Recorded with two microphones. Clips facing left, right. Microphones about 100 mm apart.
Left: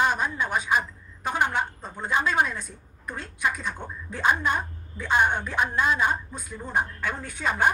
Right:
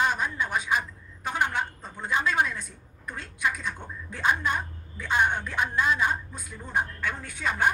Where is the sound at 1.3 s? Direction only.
40° left (ahead or behind).